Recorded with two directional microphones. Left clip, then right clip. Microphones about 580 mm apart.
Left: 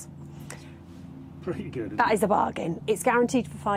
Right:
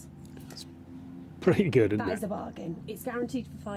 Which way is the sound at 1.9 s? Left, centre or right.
Left.